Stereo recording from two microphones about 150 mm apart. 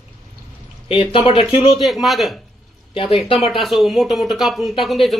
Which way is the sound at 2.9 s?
40° left (ahead or behind).